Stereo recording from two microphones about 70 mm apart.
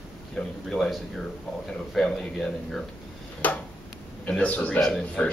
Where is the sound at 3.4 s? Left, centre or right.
Left.